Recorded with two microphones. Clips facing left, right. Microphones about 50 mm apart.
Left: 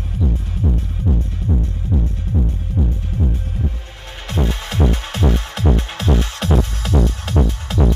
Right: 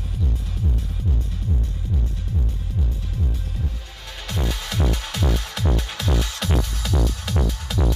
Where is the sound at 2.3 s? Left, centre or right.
Left.